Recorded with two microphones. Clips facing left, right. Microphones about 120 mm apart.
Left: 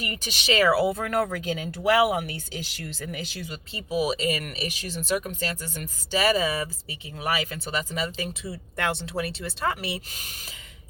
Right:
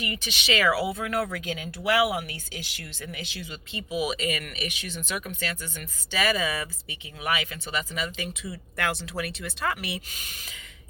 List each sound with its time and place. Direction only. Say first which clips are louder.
0.0 s speech: even; 40° left (ahead or behind)